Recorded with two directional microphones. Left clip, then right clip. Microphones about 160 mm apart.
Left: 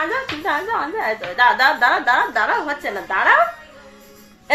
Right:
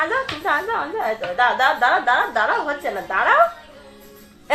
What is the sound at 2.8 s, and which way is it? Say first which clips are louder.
Speech: left 2 dB; 20° left (ahead or behind).